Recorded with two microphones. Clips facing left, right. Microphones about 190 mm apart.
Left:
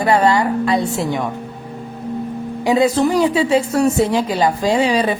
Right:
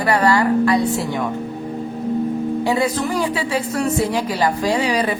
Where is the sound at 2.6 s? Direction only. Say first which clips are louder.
Left 8 dB; 20° left (ahead or behind).